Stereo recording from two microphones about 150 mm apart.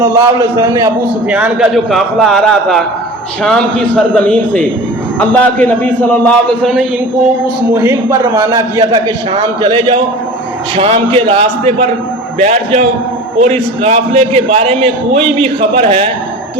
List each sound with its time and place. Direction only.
0.2 s a man's voice: 20° right (ahead or behind)
1.3 s a man's voice: 10° right (ahead or behind)
7.7 s a man's voice: 15° right (ahead or behind)
8.1 s a man's voice: 30° right (ahead or behind)
10.8 s a man's voice: 40° right (ahead or behind)
12.4 s a man's voice: 55° right (ahead or behind)
13.4 s a man's voice: 45° right (ahead or behind)